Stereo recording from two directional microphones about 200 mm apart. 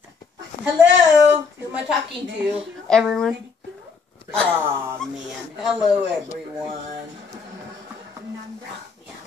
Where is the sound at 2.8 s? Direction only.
5° left (ahead or behind).